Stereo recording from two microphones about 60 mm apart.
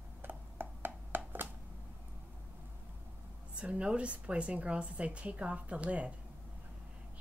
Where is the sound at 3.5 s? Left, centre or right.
Centre.